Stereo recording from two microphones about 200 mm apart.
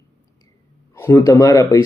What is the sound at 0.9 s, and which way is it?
Speech, 15° left (ahead or behind).